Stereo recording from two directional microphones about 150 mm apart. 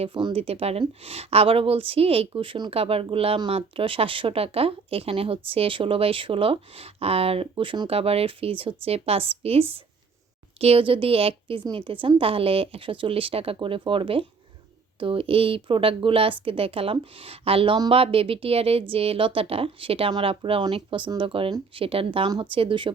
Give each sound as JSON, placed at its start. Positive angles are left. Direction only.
{"t": 0.0, "sound": "a woman's voice", "side_deg": -30}